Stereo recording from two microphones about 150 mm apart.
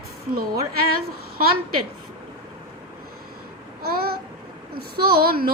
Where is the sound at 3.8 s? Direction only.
90° right.